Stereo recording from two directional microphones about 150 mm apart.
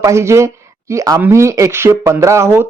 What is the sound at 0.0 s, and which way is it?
Speech, 20° right (ahead or behind).